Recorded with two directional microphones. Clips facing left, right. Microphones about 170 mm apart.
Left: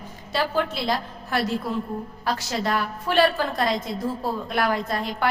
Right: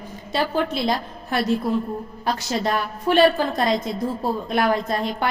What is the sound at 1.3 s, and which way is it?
A woman's voice, 20° right (ahead or behind).